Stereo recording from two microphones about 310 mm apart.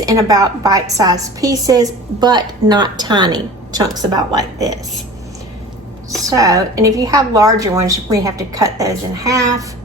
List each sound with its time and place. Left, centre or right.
0.0 s a woman's voice: centre
6.3 s a woman's voice: centre